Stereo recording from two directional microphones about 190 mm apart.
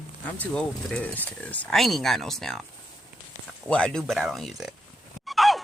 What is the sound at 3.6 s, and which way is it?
Speech, 5° left (ahead or behind).